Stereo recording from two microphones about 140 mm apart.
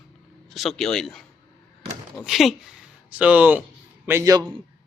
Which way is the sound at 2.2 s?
Centre (ahead or behind).